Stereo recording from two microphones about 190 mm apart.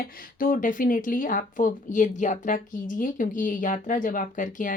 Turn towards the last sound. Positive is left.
turn(degrees=45)  # may be behind; listen again after turning